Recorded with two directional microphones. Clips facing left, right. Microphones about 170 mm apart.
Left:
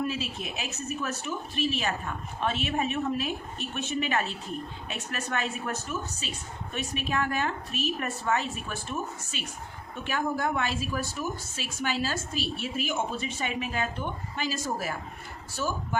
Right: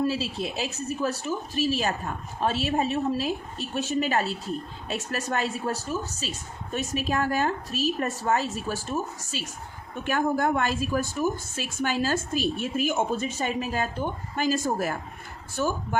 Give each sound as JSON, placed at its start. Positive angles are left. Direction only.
{"t": 0.0, "sound": "a woman's voice", "side_deg": -30}
{"t": 10.0, "sound": "a woman's voice", "side_deg": -50}